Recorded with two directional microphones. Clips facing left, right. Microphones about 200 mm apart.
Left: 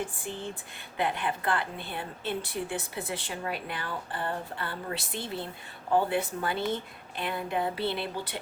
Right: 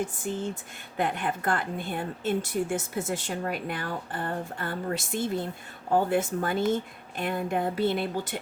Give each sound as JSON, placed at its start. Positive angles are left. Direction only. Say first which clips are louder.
{"t": 0.0, "sound": "a woman's voice", "louder": "right 5 dB", "side_deg": -45}